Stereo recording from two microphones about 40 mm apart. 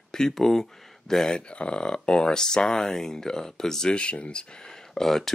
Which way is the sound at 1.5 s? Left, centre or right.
Left.